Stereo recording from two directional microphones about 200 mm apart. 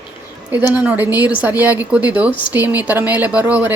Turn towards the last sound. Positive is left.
turn(degrees=-5)  # may be behind; listen again after turning